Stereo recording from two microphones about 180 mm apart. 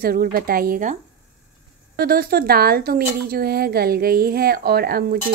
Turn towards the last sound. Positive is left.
turn(degrees=-60)  # may be behind; listen again after turning